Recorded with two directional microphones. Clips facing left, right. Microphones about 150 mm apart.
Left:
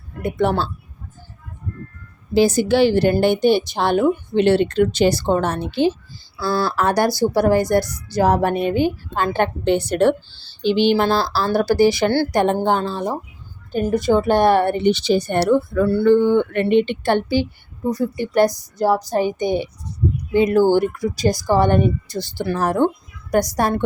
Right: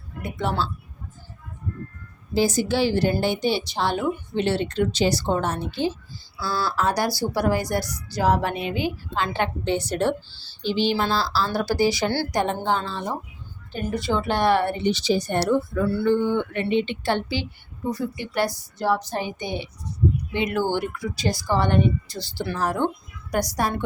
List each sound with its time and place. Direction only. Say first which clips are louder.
0.2 s a woman's voice: left 7 dB; 60° left (ahead or behind)
2.3 s a woman's voice: left 6 dB; 65° left (ahead or behind)
6.4 s a woman's voice: left 5 dB; 55° left (ahead or behind)